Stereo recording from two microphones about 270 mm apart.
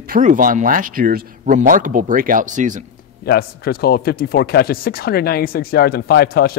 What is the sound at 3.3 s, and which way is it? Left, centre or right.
Speech, left.